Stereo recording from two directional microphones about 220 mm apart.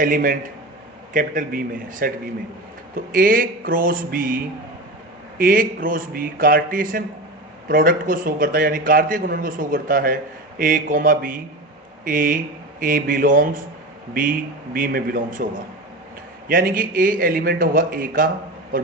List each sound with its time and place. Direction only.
0.0 s a man's voice: 40° right (ahead or behind)
5.4 s a man's voice: 40° right (ahead or behind)
16.5 s a man's voice: 40° right (ahead or behind)